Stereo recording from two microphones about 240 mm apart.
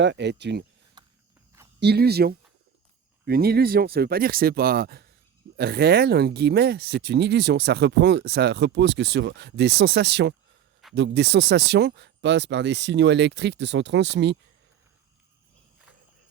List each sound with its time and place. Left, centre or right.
0.0 s speech: right
1.8 s speech: right